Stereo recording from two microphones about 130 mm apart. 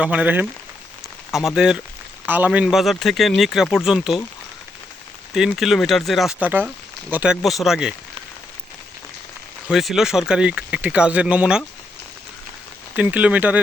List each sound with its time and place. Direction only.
0.0 s speech: 10° right (ahead or behind)
5.3 s speech: centre (ahead or behind)
6.4 s speech: 15° right (ahead or behind)
9.6 s speech: centre (ahead or behind)
13.0 s speech: 10° right (ahead or behind)